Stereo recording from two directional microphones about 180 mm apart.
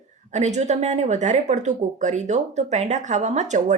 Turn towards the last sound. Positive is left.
turn(degrees=-40)  # may be behind; listen again after turning